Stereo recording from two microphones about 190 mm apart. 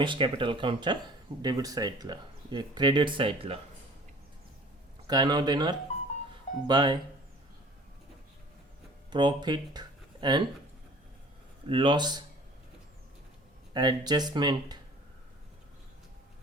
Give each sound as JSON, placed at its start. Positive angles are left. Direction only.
{"t": 0.0, "sound": "speech", "side_deg": -25}
{"t": 5.0, "sound": "speech", "side_deg": -20}
{"t": 9.0, "sound": "speech", "side_deg": -20}
{"t": 11.7, "sound": "speech", "side_deg": -25}
{"t": 13.7, "sound": "speech", "side_deg": -20}